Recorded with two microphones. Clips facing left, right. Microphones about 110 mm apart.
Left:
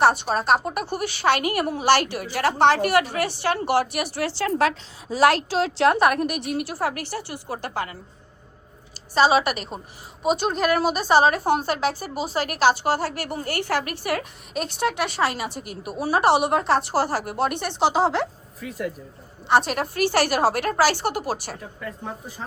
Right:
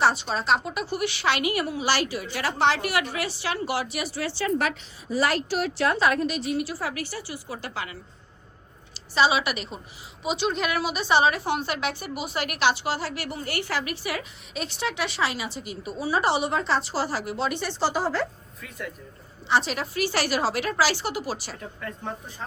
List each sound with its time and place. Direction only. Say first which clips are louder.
0.0 s a woman's voice: left 4 dB; 55° left (ahead or behind)
0.9 s a woman's voice: left 4 dB; 45° left (ahead or behind)
9.1 s a woman's voice: left 4 dB; 45° left (ahead or behind); by 18.3 s 75° left (ahead or behind)
19.5 s a woman's voice: left 4 dB; 55° left (ahead or behind)
21.6 s speech: left 1 dB; 5° left (ahead or behind)